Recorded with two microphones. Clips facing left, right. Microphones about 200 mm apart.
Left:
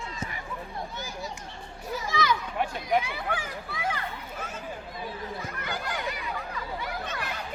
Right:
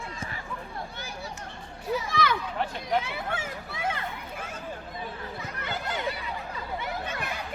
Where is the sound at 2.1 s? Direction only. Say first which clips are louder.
Left 2 dB; 60° right (ahead or behind).